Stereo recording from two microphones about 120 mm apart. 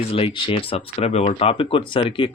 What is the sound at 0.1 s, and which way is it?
Speech, 50° left (ahead or behind).